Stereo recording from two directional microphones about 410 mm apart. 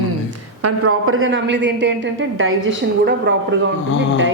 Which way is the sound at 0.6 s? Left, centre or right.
Right.